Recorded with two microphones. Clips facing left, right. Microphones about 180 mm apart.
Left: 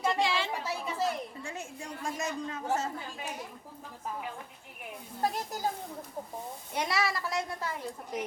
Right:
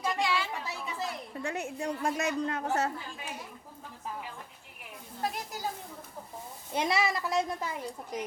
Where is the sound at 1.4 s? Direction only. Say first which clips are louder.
Right 7 dB; 65° right (ahead or behind).